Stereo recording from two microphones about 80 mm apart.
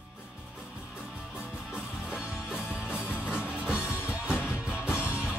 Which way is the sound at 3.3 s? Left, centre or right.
Centre.